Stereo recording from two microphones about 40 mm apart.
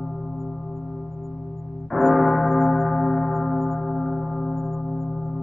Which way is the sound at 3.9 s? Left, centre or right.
Left.